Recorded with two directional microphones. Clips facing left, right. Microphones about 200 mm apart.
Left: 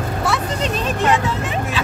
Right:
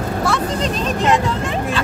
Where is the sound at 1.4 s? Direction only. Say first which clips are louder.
Right 2 dB; 5° left (ahead or behind).